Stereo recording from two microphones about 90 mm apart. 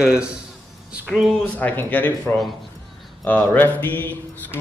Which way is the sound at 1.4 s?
15° left (ahead or behind).